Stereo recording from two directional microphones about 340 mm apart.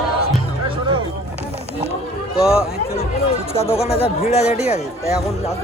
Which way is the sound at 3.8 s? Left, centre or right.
Centre.